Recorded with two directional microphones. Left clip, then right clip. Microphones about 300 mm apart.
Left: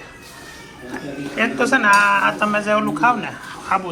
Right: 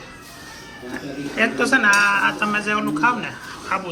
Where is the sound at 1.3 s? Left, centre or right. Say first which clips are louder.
Even; centre.